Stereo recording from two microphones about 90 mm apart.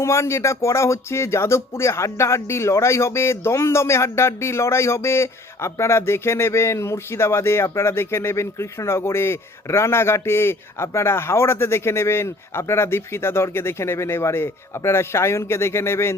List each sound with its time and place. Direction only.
0.0 s speech: 30° left (ahead or behind)